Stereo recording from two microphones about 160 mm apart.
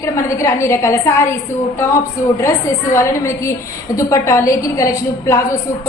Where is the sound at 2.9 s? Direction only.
15° left (ahead or behind).